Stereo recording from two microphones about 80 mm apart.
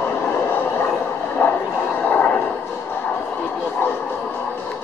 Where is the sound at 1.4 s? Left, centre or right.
Left.